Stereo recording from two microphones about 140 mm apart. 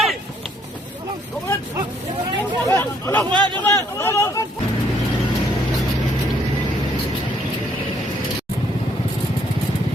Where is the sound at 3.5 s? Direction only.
15° left (ahead or behind).